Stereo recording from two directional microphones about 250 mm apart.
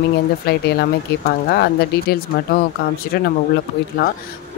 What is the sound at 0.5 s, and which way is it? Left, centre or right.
Speech, left.